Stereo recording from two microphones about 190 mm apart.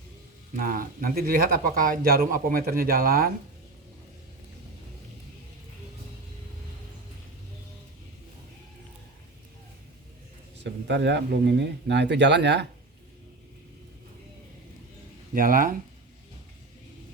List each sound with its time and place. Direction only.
0.6 s speech: 45° right (ahead or behind)
10.6 s speech: 65° right (ahead or behind)
15.4 s speech: 45° right (ahead or behind)